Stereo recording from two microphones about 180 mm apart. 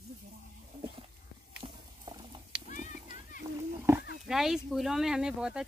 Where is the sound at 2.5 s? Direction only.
65° right (ahead or behind).